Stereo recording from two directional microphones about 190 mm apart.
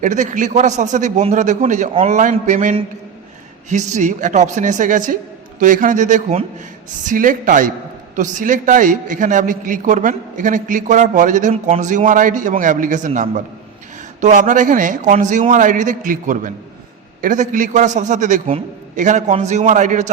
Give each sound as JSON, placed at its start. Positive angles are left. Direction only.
{"t": 0.0, "sound": "a man's voice", "side_deg": -40}